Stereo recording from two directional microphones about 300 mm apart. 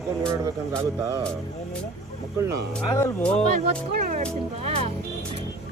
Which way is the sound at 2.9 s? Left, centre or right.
Centre.